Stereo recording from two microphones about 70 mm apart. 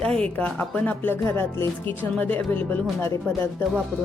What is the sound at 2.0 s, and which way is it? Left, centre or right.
Speech, left.